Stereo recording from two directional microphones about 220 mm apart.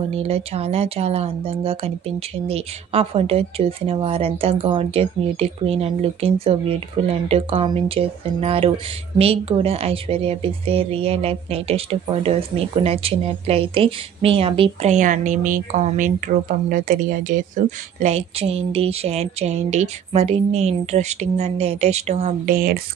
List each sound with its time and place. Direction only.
0.1 s a woman's voice: 30° right (ahead or behind)